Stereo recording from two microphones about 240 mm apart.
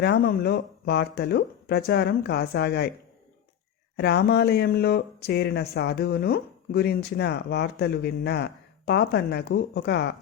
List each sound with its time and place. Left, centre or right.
0.0 s speech: left
3.9 s speech: left